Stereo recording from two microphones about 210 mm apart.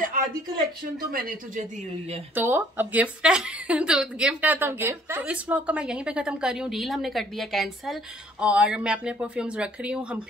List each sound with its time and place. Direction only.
1.1 s speech: 40° right (ahead or behind)
2.3 s a woman's voice: 10° right (ahead or behind)